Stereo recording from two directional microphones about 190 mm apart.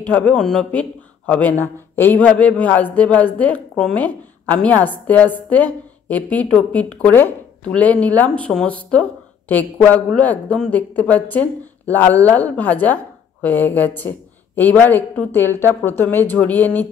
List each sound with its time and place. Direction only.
0.0 s a man's voice: 10° left (ahead or behind)